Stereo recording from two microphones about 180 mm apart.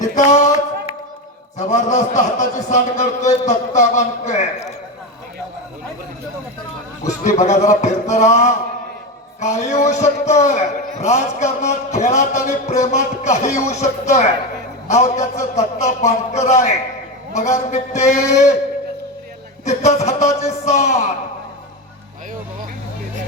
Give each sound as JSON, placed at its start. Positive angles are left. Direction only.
{"t": 0.1, "sound": "a sound", "side_deg": 40}
{"t": 1.5, "sound": "a man's voice", "side_deg": 40}
{"t": 7.3, "sound": "a man's voice", "side_deg": 40}
{"t": 19.6, "sound": "a man's voice", "side_deg": 40}